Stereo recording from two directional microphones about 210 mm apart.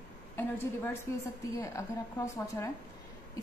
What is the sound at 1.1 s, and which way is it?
A woman's voice, 10° left (ahead or behind).